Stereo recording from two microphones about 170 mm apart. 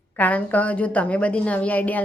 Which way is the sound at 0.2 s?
10° left (ahead or behind).